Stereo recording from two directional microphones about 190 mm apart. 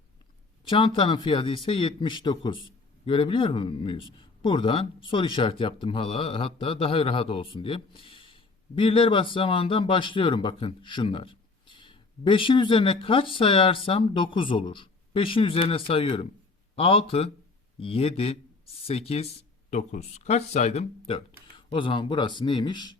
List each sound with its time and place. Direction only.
0.7 s a man's voice: 25° left (ahead or behind)